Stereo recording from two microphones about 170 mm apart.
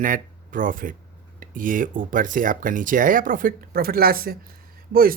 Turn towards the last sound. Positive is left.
turn(degrees=-60)  # may be behind; listen again after turning